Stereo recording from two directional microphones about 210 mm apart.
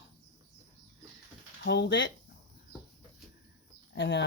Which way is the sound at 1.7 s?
55° left (ahead or behind).